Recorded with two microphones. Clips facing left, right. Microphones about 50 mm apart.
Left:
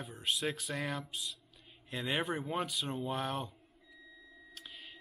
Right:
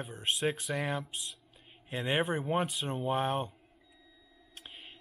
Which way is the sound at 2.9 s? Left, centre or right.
Right.